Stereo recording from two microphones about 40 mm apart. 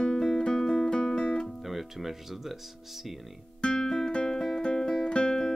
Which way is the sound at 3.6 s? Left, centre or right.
Centre.